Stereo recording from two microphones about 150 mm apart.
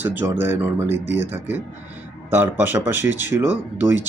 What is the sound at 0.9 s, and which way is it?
Speech, 45° left (ahead or behind).